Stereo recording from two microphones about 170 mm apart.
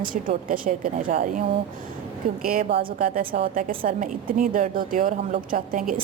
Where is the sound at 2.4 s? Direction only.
60° right (ahead or behind).